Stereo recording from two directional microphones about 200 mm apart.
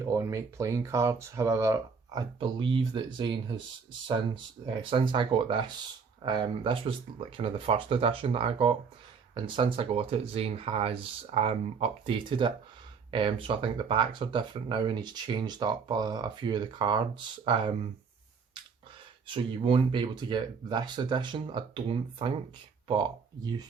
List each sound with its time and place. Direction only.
0.0 s speech: 15° right (ahead or behind)
4.6 s speech: 25° right (ahead or behind)
19.3 s speech: 25° right (ahead or behind)